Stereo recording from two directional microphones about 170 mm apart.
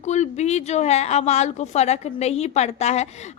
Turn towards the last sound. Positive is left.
turn(degrees=40)  # may be behind; listen again after turning